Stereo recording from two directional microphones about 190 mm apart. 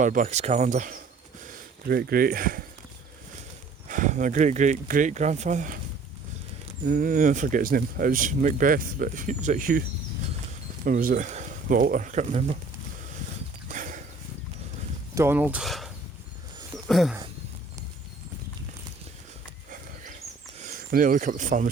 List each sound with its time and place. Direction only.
0.0 s speech: 45° right (ahead or behind)
1.5 s speech: 55° right (ahead or behind)
3.8 s speech: 40° right (ahead or behind)
6.8 s speech: 45° right (ahead or behind)
10.8 s speech: 50° right (ahead or behind)
13.7 s horse: 45° right (ahead or behind)
15.1 s speech: 10° right (ahead or behind)
16.7 s a sound: centre (ahead or behind)
20.6 s speech: 45° right (ahead or behind)